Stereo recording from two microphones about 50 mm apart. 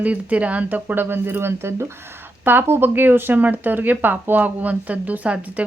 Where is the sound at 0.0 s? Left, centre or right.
Right.